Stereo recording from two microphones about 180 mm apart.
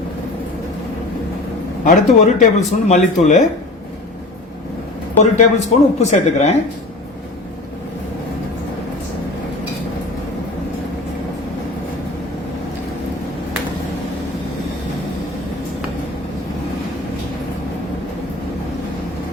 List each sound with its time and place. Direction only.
1.8 s speech: 45° left (ahead or behind)
5.1 s speech: 40° left (ahead or behind)